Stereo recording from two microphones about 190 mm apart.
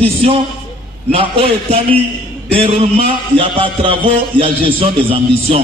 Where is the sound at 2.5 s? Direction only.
30° right (ahead or behind).